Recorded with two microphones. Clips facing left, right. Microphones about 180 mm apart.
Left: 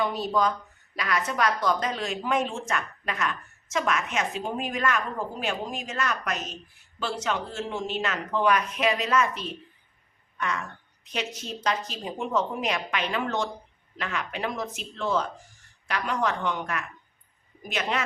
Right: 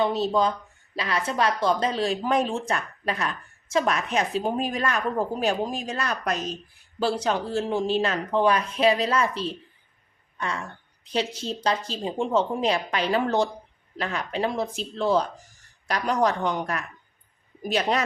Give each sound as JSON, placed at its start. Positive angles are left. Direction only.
{"t": 0.0, "sound": "a woman's voice", "side_deg": -25}